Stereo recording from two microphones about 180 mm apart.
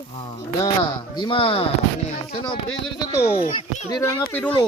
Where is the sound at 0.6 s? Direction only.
25° left (ahead or behind).